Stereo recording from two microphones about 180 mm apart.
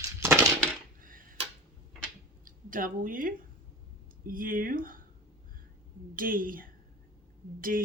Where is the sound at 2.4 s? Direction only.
50° right (ahead or behind).